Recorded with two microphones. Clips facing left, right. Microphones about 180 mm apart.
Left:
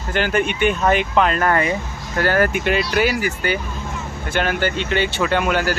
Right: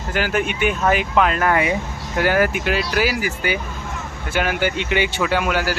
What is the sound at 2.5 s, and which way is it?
Speech, centre (ahead or behind).